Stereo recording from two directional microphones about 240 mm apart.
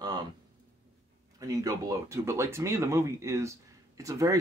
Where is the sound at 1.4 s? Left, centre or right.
Centre.